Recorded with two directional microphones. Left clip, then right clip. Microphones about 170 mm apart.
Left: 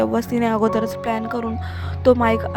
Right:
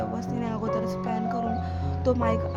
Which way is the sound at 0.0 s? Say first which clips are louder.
Left 11 dB; 55° left (ahead or behind).